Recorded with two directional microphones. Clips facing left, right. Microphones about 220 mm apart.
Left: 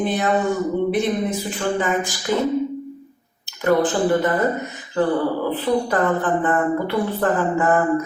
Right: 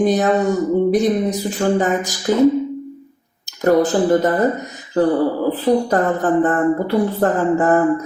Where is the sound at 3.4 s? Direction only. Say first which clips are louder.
Right 4 dB; 40° right (ahead or behind).